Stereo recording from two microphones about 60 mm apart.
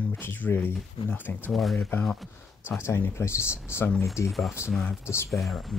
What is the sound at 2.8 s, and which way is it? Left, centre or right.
Speech, left.